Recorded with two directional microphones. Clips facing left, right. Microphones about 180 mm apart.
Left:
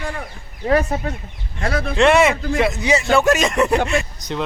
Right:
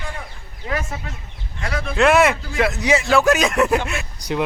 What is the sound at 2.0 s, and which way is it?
Speech, centre (ahead or behind).